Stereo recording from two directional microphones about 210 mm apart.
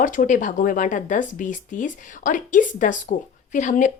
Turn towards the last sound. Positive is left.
turn(degrees=35)  # may be behind; listen again after turning